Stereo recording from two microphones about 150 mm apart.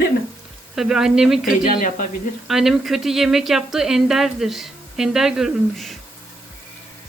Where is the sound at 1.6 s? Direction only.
60° left (ahead or behind).